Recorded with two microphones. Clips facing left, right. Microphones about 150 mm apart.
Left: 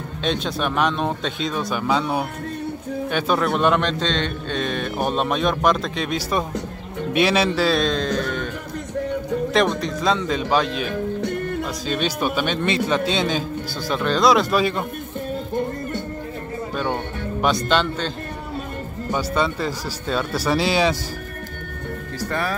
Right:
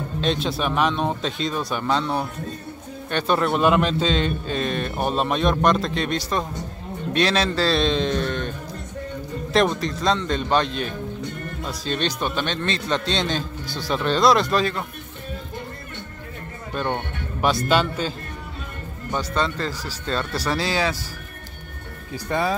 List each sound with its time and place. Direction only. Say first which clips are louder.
0.2 s a man's voice: even; centre (ahead or behind)
9.5 s a man's voice: right 2 dB; centre (ahead or behind)
10.9 s music: left 6 dB; 70° left (ahead or behind)
11.6 s a man's voice: left 2 dB; 5° left (ahead or behind)
16.7 s a man's voice: even; centre (ahead or behind)
19.1 s speech: left 2 dB; 10° left (ahead or behind)
22.3 s speech: right 3 dB; 20° right (ahead or behind)